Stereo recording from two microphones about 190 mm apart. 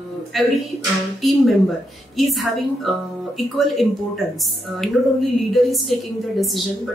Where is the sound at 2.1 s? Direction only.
Centre (ahead or behind).